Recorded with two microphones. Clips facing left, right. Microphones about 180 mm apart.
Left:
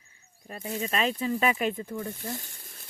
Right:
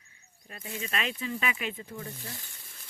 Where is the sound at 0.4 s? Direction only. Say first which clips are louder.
Left 6 dB; 40° left (ahead or behind).